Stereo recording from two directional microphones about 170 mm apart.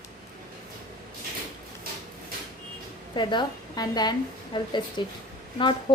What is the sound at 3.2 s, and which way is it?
A woman's voice, 25° left (ahead or behind).